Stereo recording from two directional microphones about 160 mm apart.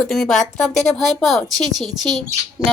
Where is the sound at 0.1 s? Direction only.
Centre (ahead or behind).